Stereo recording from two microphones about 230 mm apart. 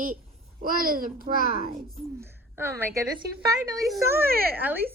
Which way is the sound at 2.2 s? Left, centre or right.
Centre.